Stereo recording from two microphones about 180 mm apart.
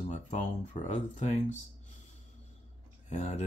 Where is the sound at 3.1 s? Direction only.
40° left (ahead or behind).